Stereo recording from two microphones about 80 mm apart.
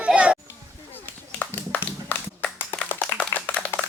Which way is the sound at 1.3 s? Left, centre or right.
Centre.